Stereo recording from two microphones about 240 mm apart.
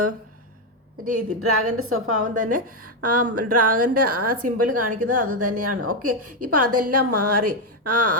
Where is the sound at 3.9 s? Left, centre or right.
Right.